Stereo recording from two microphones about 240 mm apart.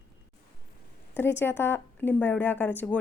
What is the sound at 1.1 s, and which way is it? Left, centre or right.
A woman's voice, centre.